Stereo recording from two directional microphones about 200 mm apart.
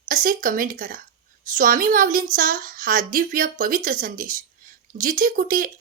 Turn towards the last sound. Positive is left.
turn(degrees=-45)  # may be behind; listen again after turning